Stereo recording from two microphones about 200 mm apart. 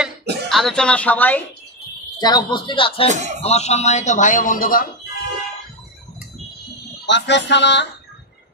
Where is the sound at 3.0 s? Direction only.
35° right (ahead or behind).